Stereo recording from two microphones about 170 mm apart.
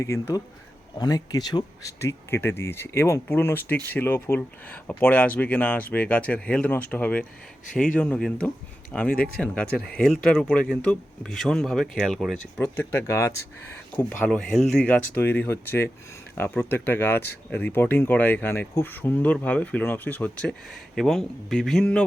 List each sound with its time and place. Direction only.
0.0 s speech: 15° left (ahead or behind)
13.9 s speech: 5° left (ahead or behind)